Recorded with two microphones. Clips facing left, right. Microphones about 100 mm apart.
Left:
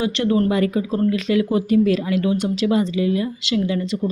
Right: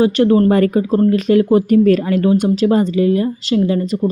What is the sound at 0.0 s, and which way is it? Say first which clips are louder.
Speech: right 7 dB; 40° right (ahead or behind).